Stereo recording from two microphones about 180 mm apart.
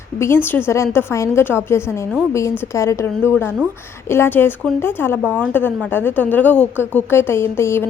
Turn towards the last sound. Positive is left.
turn(degrees=15)  # may be behind; listen again after turning